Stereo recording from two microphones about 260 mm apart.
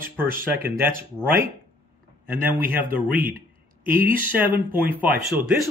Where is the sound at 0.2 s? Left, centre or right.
Centre.